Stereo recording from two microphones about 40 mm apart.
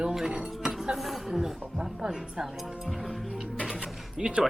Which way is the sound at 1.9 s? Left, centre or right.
Centre.